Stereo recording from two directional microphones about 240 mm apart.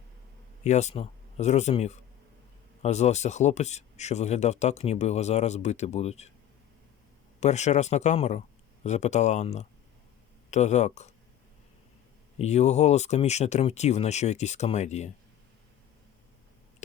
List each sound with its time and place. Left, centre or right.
0.6 s speech: left
7.3 s speech: left
12.4 s speech: left